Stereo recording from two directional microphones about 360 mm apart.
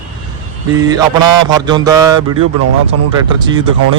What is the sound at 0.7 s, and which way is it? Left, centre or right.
A man's voice, centre.